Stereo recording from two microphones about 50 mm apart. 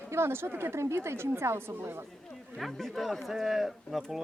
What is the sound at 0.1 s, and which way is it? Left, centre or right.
A woman's voice, right.